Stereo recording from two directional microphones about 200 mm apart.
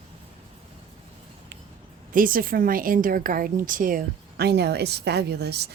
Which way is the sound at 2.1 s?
45° right (ahead or behind).